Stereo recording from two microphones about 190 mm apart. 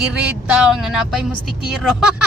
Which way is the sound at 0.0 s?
5° right (ahead or behind).